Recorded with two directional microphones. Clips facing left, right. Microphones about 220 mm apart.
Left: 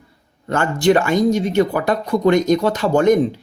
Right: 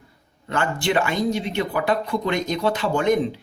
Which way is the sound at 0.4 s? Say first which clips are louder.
Left 8 dB; 45° left (ahead or behind).